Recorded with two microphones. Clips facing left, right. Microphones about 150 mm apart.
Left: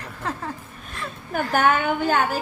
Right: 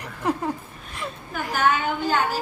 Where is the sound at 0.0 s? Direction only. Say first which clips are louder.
Right 5 dB; 15° right (ahead or behind).